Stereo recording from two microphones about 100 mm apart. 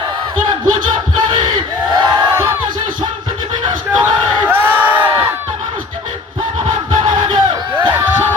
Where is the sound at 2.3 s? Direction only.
25° right (ahead or behind).